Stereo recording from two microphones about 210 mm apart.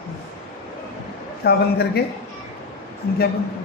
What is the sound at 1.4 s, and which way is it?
Speech, 50° left (ahead or behind).